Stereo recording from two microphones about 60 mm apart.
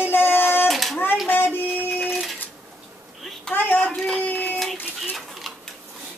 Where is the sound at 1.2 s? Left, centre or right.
Left.